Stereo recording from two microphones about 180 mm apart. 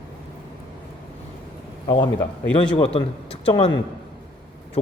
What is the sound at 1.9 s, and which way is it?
A man's voice, 25° left (ahead or behind).